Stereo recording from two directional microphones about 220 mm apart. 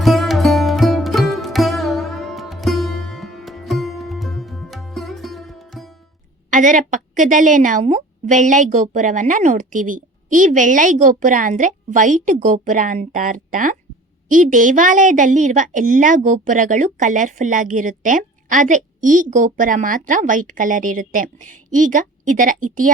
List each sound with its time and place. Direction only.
0.0 s sitar: centre (ahead or behind)
6.5 s a woman's voice: 35° right (ahead or behind)